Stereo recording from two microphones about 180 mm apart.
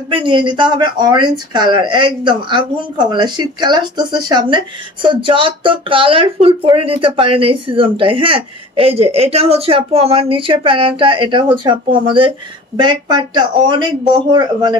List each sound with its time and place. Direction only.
0.1 s speech: 25° right (ahead or behind)